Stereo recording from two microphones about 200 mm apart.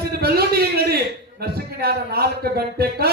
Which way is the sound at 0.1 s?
50° right (ahead or behind).